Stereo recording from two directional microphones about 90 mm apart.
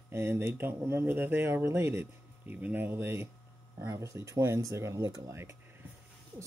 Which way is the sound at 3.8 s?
40° right (ahead or behind).